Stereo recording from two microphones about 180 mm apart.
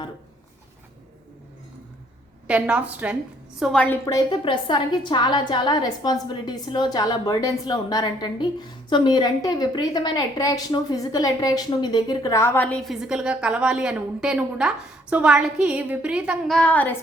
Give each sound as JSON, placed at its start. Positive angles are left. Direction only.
{"t": 2.5, "sound": "a woman's voice", "side_deg": -5}
{"t": 3.6, "sound": "a woman's voice", "side_deg": 5}
{"t": 4.0, "sound": "a woman's voice", "side_deg": 25}